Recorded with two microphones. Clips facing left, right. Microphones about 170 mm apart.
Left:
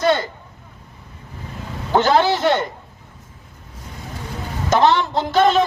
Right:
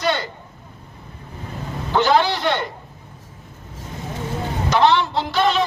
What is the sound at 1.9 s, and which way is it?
Speech, 45° left (ahead or behind).